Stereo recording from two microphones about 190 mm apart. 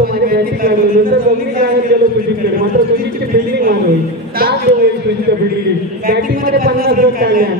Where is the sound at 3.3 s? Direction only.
50° right (ahead or behind).